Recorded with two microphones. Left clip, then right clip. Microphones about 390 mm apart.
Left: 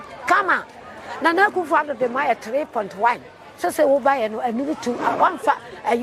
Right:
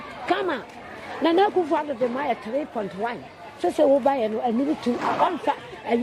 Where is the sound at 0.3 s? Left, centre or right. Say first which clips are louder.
Left 7 dB; left.